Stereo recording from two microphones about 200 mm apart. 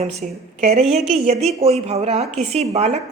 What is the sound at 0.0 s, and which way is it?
A woman's voice, 30° right (ahead or behind).